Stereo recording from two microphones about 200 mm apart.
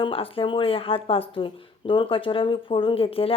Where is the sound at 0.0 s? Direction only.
25° left (ahead or behind).